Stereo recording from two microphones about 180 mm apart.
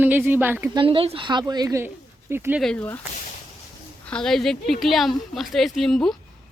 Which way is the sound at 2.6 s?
10° left (ahead or behind).